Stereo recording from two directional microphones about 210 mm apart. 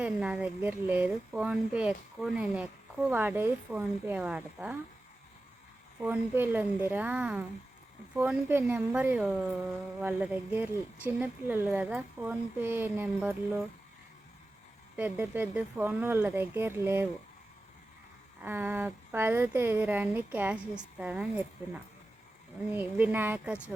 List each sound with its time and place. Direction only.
0.0 s speech: 5° right (ahead or behind)
6.0 s speech: 10° right (ahead or behind)
14.9 s speech: 5° right (ahead or behind)
18.4 s speech: 10° right (ahead or behind)
22.7 s speech: 10° right (ahead or behind)